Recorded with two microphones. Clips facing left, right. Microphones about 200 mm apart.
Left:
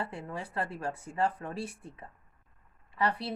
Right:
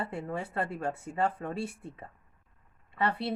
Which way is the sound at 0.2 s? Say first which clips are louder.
Right 3 dB; 25° right (ahead or behind).